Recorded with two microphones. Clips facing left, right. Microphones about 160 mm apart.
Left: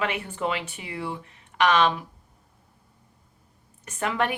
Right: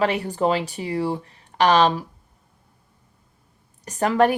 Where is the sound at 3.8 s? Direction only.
35° right (ahead or behind).